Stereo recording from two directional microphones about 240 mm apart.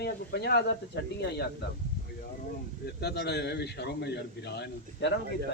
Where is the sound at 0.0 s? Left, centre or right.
Left.